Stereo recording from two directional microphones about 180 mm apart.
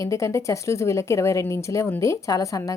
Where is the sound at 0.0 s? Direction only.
15° left (ahead or behind).